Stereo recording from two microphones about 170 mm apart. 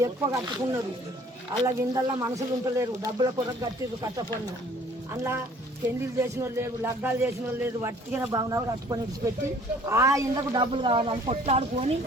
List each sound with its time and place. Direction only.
0.0 s speech: 15° right (ahead or behind)
5.1 s speech: 15° right (ahead or behind); by 11.9 s 40° right (ahead or behind)